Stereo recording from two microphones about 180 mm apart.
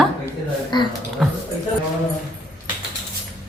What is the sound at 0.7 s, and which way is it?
Speech, 25° left (ahead or behind).